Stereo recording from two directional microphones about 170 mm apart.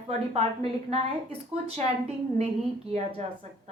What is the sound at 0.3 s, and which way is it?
A woman's voice, 40° right (ahead or behind).